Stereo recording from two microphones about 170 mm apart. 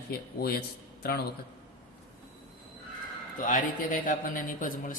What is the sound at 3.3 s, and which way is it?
A man's voice, 50° left (ahead or behind).